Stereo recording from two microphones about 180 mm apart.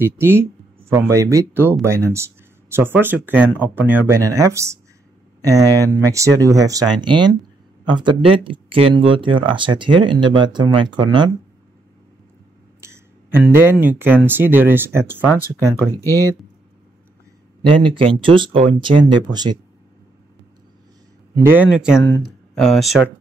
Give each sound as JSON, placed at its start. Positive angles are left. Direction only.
{"t": 0.0, "sound": "speech", "side_deg": -15}
{"t": 12.8, "sound": "speech", "side_deg": -10}
{"t": 15.7, "sound": "speech", "side_deg": 15}
{"t": 17.6, "sound": "speech", "side_deg": -30}
{"t": 21.4, "sound": "speech", "side_deg": -10}